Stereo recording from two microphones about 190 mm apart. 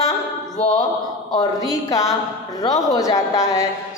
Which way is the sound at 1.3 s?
20° left (ahead or behind).